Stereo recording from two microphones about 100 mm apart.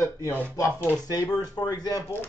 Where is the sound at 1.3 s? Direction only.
40° left (ahead or behind).